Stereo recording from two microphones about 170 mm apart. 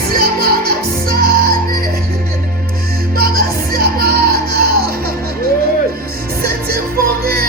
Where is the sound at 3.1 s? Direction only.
65° right (ahead or behind).